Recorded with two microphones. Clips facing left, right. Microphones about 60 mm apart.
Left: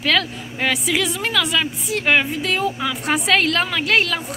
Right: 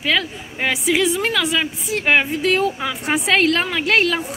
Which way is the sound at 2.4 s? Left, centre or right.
Right.